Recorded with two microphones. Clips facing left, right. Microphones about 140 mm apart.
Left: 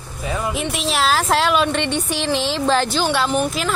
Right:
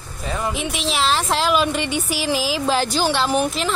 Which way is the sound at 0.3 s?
Centre (ahead or behind).